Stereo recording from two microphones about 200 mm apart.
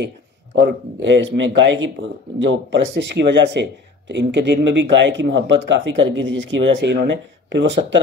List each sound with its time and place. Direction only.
0.6 s speech: 60° right (ahead or behind)